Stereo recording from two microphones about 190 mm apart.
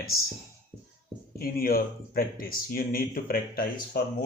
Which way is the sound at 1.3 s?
50° left (ahead or behind).